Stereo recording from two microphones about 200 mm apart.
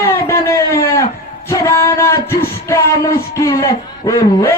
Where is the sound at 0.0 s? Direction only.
15° left (ahead or behind).